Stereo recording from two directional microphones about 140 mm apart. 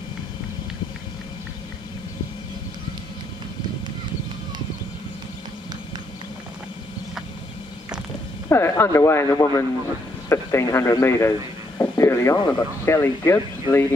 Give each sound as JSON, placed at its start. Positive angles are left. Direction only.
{"t": 8.5, "sound": "speech", "side_deg": 20}